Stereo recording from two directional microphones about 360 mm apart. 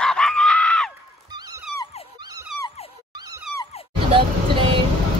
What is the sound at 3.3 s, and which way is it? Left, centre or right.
Dog, right.